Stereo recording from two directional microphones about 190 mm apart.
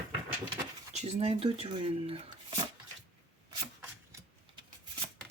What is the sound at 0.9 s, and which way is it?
Speech, 35° right (ahead or behind).